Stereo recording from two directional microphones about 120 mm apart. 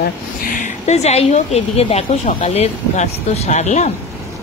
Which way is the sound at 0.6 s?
70° left (ahead or behind).